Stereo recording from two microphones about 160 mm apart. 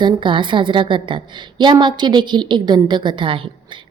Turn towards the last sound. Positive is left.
turn(degrees=-30)  # may be behind; listen again after turning